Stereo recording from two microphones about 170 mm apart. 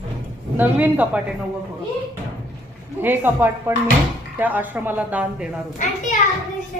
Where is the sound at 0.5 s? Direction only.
10° right (ahead or behind).